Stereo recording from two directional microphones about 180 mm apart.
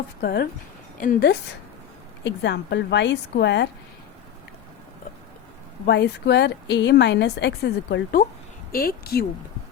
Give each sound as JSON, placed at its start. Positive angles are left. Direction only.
{"t": 0.2, "sound": "speech", "side_deg": 60}
{"t": 2.2, "sound": "a woman's voice", "side_deg": 80}
{"t": 5.8, "sound": "a woman's voice", "side_deg": 70}
{"t": 8.7, "sound": "speech", "side_deg": 55}